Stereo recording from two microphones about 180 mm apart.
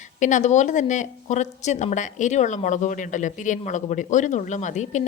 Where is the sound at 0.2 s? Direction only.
45° left (ahead or behind).